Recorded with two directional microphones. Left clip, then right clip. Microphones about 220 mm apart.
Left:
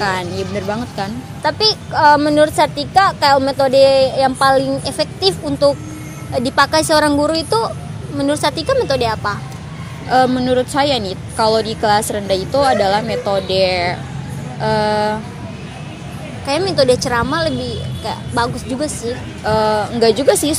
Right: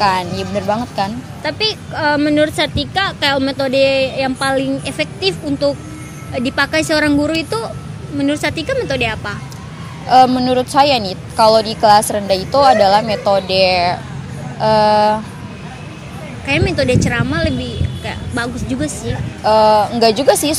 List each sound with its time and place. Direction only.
0.0 s a woman's voice: 15° right (ahead or behind)
1.4 s a woman's voice: 25° left (ahead or behind)
10.0 s a woman's voice: 15° right (ahead or behind)
16.4 s a woman's voice: 20° left (ahead or behind)
19.4 s a woman's voice: 15° right (ahead or behind)